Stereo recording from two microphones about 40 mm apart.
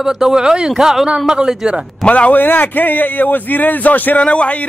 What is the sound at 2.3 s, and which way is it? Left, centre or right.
Speech, left.